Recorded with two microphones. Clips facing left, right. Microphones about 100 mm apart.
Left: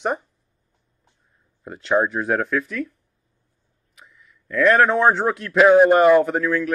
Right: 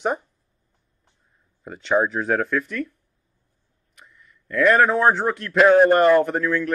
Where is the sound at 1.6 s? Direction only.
Centre (ahead or behind).